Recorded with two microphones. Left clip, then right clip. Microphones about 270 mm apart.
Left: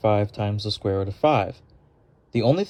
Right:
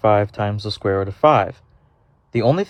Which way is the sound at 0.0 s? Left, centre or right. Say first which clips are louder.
Right 6 dB; right.